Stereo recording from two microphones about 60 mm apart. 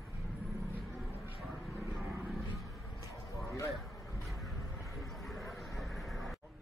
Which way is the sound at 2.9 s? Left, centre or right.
Left.